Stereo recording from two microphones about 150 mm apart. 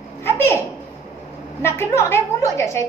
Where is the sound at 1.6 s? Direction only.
15° left (ahead or behind).